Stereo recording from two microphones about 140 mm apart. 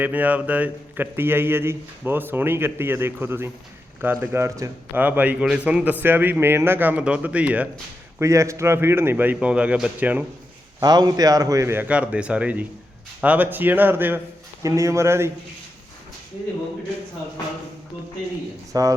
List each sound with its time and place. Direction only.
0.0 s a man's voice: 10° right (ahead or behind)
8.2 s a man's voice: 20° right (ahead or behind)
10.8 s a man's voice: 30° right (ahead or behind)
18.7 s a man's voice: 25° right (ahead or behind)